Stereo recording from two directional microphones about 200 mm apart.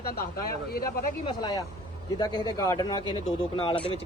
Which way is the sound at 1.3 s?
20° left (ahead or behind).